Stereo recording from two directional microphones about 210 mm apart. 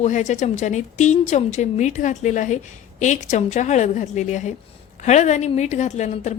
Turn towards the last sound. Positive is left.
turn(degrees=35)  # may be behind; listen again after turning